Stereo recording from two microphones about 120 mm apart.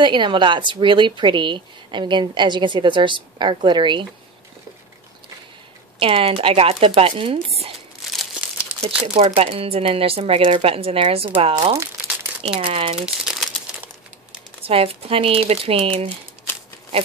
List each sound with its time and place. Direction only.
0.0 s speech: 40° right (ahead or behind)
5.9 s speech: 50° right (ahead or behind)
9.0 s speech: 60° right (ahead or behind)
12.5 s speech: 45° right (ahead or behind)
12.9 s a sound: 5° right (ahead or behind)
14.6 s speech: 55° right (ahead or behind)